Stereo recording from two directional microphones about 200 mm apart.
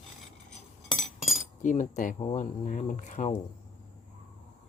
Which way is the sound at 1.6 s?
40° left (ahead or behind).